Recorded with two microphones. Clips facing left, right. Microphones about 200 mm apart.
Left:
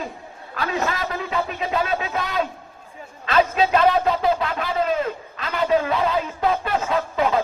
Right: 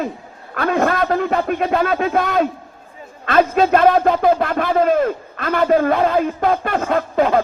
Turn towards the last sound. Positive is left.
turn(degrees=-55)  # may be behind; listen again after turning